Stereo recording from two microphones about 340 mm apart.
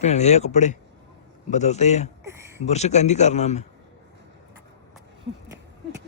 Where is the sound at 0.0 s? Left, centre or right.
Centre.